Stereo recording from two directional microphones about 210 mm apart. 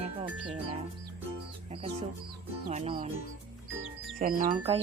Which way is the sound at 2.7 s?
30° right (ahead or behind).